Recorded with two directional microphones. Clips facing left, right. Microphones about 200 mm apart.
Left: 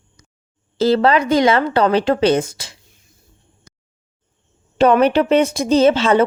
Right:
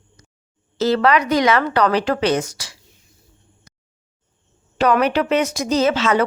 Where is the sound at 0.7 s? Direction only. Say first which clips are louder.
Left 2 dB; 30° left (ahead or behind).